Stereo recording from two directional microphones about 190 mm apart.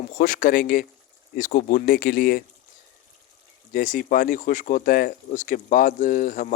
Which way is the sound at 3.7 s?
45° left (ahead or behind).